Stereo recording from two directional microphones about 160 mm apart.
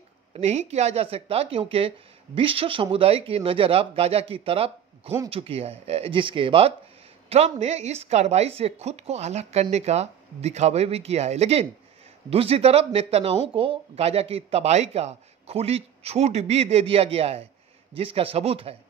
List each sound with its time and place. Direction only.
0.3 s speech: 45° right (ahead or behind)